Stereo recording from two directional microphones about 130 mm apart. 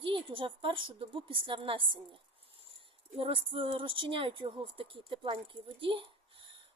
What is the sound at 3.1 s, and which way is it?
Speech, 45° right (ahead or behind).